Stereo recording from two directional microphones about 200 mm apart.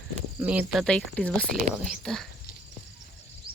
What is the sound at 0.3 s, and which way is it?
Speech, 10° right (ahead or behind).